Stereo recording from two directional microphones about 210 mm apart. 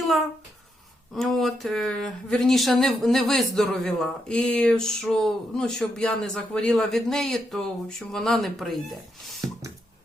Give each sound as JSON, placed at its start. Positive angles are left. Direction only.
{"t": 1.1, "sound": "speech", "side_deg": 0}